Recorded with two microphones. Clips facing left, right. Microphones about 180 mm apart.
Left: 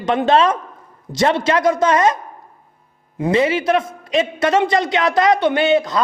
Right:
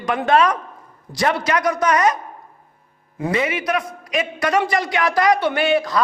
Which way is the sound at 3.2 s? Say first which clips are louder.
Left 5 dB; 25° left (ahead or behind).